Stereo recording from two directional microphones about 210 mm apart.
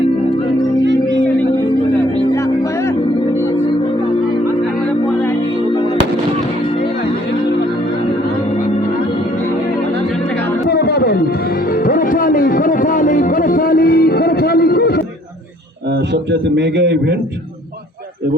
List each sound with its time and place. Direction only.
10.7 s a sound: 50° left (ahead or behind)
11.7 s music: 40° left (ahead or behind)
16.1 s a man's voice: 55° right (ahead or behind)